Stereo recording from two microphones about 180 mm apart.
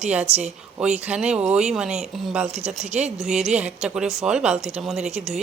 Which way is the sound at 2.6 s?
40° right (ahead or behind).